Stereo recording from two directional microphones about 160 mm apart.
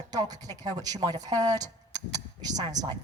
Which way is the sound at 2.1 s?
25° right (ahead or behind).